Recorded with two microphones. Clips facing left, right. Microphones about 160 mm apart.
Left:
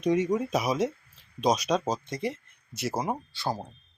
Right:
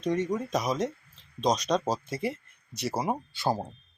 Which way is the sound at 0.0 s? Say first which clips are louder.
Left 3 dB; 10° left (ahead or behind).